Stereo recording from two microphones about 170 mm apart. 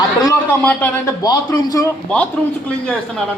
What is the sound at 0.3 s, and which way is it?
A man's voice, 15° left (ahead or behind).